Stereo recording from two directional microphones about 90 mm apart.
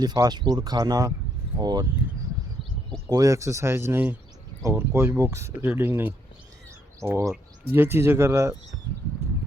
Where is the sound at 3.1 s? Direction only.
40° right (ahead or behind).